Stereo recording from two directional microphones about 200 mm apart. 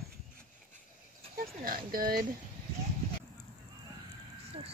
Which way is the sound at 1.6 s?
45° right (ahead or behind).